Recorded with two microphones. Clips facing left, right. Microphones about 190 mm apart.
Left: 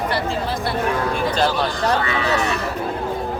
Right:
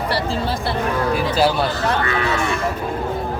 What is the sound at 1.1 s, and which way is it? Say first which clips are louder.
Speech: right 2 dB; 5° right (ahead or behind).